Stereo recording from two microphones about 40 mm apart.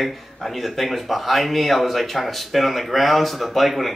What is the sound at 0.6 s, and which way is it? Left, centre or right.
Speech, centre.